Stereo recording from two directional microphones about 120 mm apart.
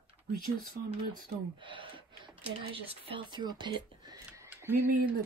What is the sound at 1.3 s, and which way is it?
Speech, 45° right (ahead or behind).